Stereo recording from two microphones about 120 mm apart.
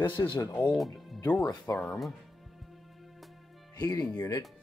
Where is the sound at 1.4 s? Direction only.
30° left (ahead or behind).